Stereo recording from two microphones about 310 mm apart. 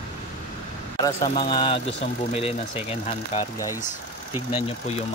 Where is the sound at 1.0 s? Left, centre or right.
Centre.